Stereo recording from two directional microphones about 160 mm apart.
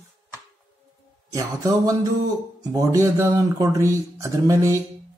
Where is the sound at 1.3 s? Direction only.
25° right (ahead or behind).